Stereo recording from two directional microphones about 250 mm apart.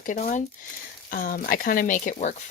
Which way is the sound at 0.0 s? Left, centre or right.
Left.